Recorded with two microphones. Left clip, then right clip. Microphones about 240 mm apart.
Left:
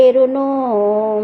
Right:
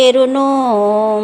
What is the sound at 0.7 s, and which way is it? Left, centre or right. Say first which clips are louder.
Speech: right 3 dB; right.